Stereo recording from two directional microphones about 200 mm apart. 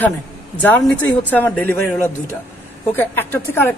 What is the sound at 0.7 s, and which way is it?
Speech, 5° left (ahead or behind).